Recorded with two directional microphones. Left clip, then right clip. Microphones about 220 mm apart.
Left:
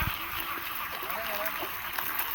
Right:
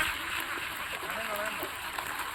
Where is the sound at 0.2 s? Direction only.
20° right (ahead or behind).